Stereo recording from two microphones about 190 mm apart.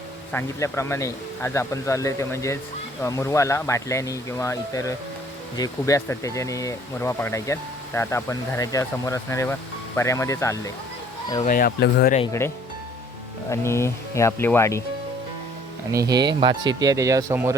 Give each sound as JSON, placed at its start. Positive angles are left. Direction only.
{"t": 0.3, "sound": "speech", "side_deg": 15}
{"t": 11.4, "sound": "speech", "side_deg": 50}
{"t": 13.5, "sound": "speech", "side_deg": 15}
{"t": 15.9, "sound": "speech", "side_deg": -20}